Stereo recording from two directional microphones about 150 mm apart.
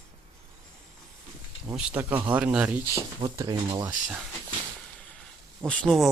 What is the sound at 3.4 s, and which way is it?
Speech, 25° right (ahead or behind).